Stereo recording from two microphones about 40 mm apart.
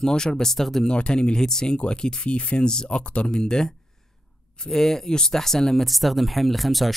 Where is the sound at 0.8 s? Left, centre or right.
Left.